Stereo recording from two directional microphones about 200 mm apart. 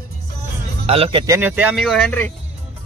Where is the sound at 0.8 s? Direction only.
30° right (ahead or behind).